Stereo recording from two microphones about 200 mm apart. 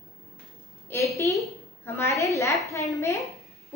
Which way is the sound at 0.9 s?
10° left (ahead or behind).